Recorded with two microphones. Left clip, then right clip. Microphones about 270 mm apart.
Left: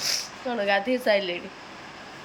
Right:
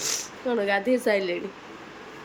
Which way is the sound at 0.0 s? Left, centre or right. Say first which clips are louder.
Left 1 dB; centre.